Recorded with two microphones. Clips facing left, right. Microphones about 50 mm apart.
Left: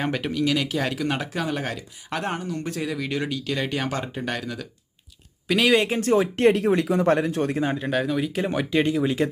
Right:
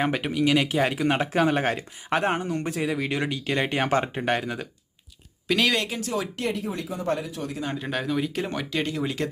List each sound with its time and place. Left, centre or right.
0.0 s speech: centre
5.5 s speech: centre
5.9 s speech: left
7.0 s speech: left
7.9 s speech: centre